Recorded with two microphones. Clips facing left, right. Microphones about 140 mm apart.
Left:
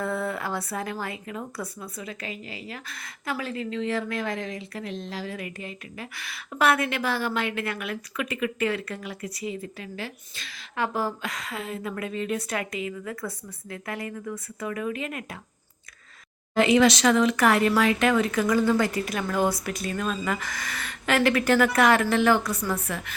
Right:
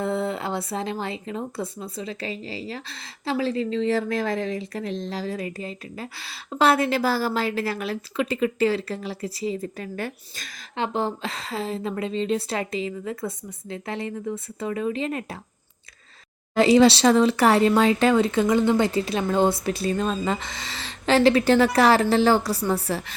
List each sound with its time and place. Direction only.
0.0 s speech: 25° right (ahead or behind); by 10.5 s 40° right (ahead or behind)
10.8 s speech: 25° right (ahead or behind)
16.6 s speech: 35° right (ahead or behind)